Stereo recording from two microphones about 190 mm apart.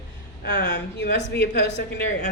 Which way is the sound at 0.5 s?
65° left (ahead or behind).